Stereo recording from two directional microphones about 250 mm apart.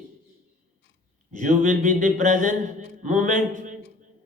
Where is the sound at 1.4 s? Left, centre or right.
Right.